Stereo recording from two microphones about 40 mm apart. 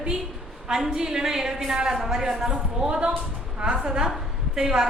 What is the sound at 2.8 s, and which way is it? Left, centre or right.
A woman's voice, right.